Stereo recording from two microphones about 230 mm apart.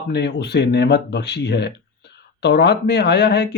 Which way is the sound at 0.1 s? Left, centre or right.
Left.